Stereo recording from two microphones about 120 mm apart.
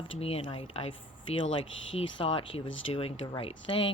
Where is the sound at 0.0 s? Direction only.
55° left (ahead or behind).